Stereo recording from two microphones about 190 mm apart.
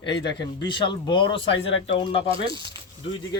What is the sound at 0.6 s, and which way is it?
Speech, 25° left (ahead or behind).